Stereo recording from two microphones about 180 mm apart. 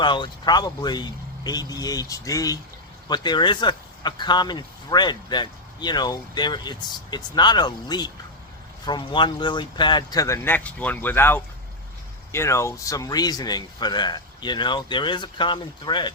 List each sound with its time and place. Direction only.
0.0 s speech: 25° left (ahead or behind)